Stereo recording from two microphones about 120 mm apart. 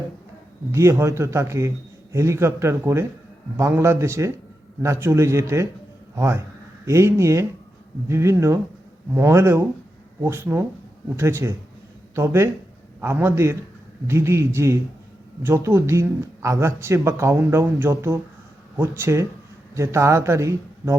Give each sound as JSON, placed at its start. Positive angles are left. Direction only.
{"t": 0.7, "sound": "speech", "side_deg": -20}